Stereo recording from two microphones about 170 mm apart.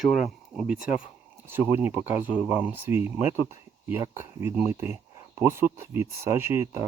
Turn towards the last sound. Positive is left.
turn(degrees=-15)  # may be behind; listen again after turning